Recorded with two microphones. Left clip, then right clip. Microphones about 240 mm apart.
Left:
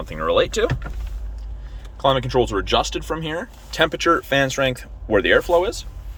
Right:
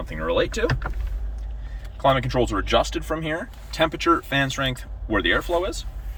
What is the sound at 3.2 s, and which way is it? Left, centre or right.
Speech, centre.